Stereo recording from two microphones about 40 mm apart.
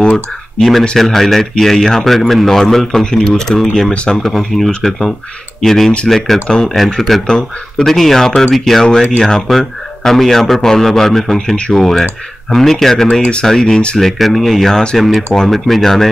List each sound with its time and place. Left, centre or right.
0.6 s a man's voice: centre
3.9 s speech: left
4.2 s a man's voice: centre
11.5 s speech: left
11.8 s a man's voice: centre
13.2 s speech: left
13.5 s a man's voice: centre